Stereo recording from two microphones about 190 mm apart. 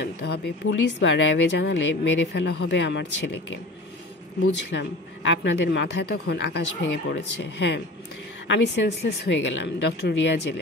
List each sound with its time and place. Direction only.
0.0 s a woman's voice: 65° left (ahead or behind)